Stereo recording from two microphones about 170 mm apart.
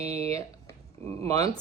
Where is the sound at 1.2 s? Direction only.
20° left (ahead or behind).